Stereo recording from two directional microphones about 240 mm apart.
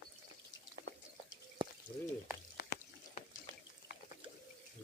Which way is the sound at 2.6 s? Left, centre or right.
Left.